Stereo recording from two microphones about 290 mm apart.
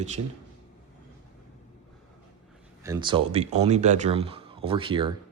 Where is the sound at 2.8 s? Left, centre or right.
Centre.